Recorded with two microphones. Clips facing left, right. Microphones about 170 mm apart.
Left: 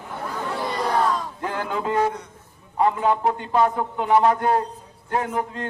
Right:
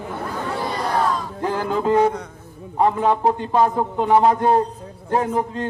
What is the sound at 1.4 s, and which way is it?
A man's voice, 35° right (ahead or behind).